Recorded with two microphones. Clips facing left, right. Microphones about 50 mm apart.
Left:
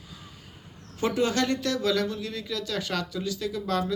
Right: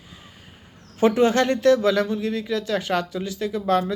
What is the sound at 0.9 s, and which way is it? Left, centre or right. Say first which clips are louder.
Speech: right 7 dB; right.